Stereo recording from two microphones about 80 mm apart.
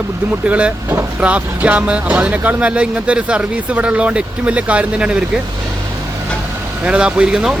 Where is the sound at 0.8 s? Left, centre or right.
Right.